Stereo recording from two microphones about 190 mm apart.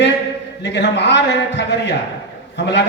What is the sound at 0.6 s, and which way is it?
Speech, 65° left (ahead or behind).